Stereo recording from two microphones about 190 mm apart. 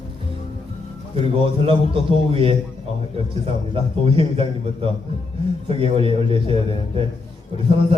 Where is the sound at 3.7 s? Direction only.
30° right (ahead or behind).